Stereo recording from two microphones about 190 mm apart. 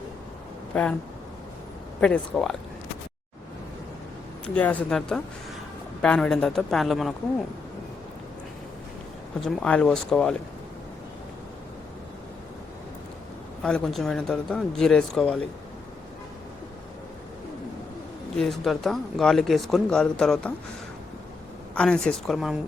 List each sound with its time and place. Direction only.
0.7 s speech: 5° left (ahead or behind)
2.0 s speech: 5° left (ahead or behind)
4.5 s speech: 10° left (ahead or behind)
9.4 s speech: 5° left (ahead or behind)
13.6 s speech: 5° left (ahead or behind)
18.3 s speech: centre (ahead or behind)
21.8 s speech: 5° left (ahead or behind)